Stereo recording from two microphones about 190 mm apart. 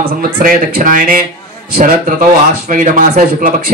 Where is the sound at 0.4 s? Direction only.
45° right (ahead or behind).